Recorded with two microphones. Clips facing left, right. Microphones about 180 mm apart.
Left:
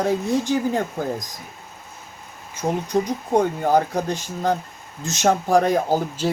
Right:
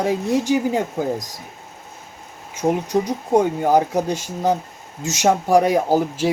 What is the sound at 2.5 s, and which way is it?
Speech, 15° right (ahead or behind).